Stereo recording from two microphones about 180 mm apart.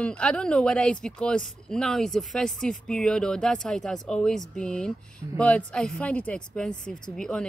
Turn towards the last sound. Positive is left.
turn(degrees=5)  # may be behind; listen again after turning